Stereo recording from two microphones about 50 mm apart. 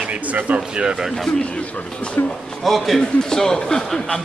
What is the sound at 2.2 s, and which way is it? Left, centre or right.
Speech, left.